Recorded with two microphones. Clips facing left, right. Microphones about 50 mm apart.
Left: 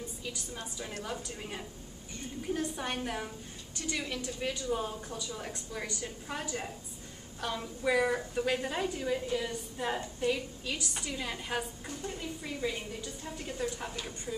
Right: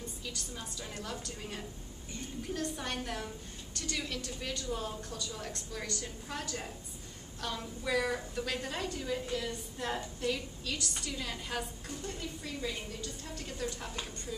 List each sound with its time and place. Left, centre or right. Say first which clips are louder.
0.2 s a woman's voice: left 2 dB; centre